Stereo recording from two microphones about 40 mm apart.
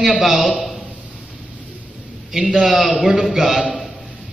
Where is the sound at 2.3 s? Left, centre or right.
Centre.